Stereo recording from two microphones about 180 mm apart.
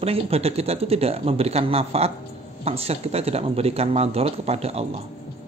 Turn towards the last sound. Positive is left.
turn(degrees=-35)  # may be behind; listen again after turning